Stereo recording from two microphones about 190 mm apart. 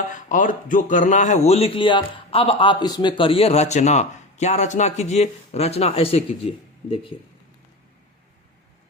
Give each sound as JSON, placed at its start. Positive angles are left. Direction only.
{"t": 0.3, "sound": "a man's voice", "side_deg": 45}